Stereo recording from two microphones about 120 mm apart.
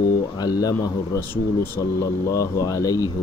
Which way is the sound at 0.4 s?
30° left (ahead or behind).